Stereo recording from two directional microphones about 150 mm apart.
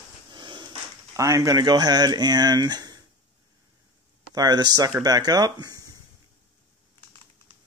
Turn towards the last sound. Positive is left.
turn(degrees=-25)  # may be behind; listen again after turning